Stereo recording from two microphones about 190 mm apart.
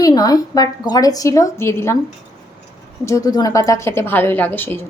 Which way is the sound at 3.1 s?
15° left (ahead or behind).